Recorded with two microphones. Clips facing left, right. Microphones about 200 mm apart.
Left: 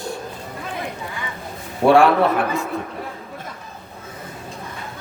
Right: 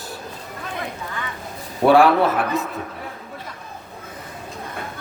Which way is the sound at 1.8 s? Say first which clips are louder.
Even; centre (ahead or behind).